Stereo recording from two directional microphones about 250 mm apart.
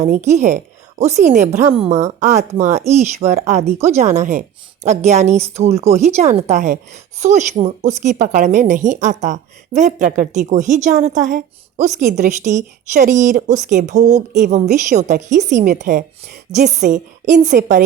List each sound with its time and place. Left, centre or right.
0.0 s speech: right